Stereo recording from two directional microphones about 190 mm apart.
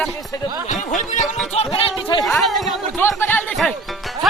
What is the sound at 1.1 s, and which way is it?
Music, 40° left (ahead or behind).